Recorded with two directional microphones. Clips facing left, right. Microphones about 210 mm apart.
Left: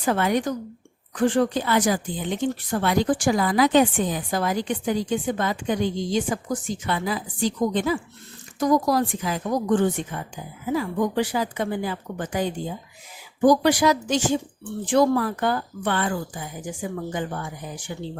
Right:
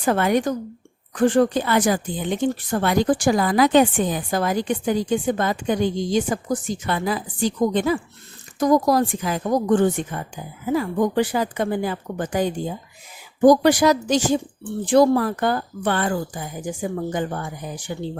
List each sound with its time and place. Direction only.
0.0 s speech: 50° right (ahead or behind)